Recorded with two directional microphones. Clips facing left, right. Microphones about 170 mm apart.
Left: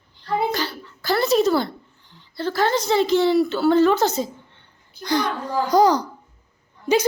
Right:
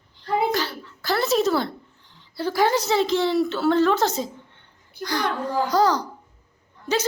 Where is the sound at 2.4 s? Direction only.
10° right (ahead or behind).